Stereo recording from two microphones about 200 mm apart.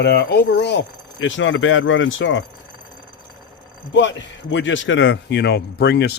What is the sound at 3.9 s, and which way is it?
A man's voice, 65° left (ahead or behind).